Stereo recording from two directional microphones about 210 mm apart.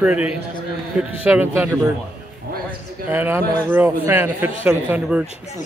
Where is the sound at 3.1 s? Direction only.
10° right (ahead or behind).